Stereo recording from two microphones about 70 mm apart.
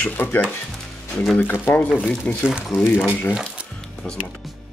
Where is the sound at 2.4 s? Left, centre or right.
Centre.